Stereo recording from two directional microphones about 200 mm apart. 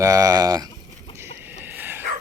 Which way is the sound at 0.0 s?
15° right (ahead or behind).